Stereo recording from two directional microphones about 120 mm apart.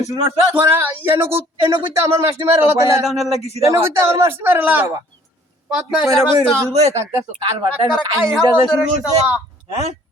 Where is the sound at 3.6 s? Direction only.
25° right (ahead or behind); by 6.1 s 5° right (ahead or behind).